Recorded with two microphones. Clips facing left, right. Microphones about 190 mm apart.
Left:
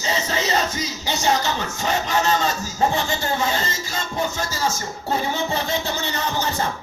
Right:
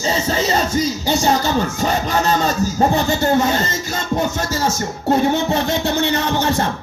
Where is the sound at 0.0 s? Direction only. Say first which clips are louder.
Right 5 dB; 30° right (ahead or behind).